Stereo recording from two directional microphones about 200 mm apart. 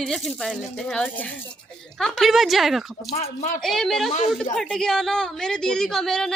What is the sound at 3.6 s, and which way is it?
A woman's voice, centre (ahead or behind).